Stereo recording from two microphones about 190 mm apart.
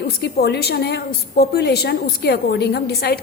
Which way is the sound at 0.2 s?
60° left (ahead or behind).